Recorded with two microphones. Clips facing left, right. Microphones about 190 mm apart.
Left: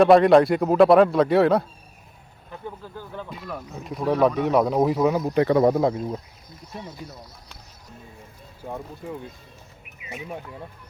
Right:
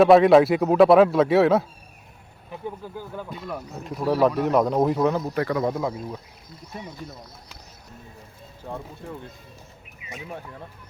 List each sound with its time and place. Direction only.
0.0 s speech: centre (ahead or behind)
2.5 s speech: 15° right (ahead or behind); by 5.3 s 5° left (ahead or behind)
5.3 s speech: 25° left (ahead or behind)
5.6 s speech: 35° left (ahead or behind)
8.6 s speech: 10° left (ahead or behind)
10.2 s speech: 10° left (ahead or behind)